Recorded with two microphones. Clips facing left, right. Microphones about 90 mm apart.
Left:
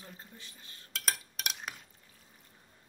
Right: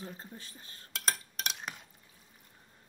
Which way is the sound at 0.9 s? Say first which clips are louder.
Right 2 dB; 5° left (ahead or behind).